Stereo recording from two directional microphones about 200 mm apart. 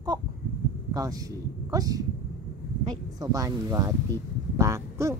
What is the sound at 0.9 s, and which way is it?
Speech, 20° right (ahead or behind).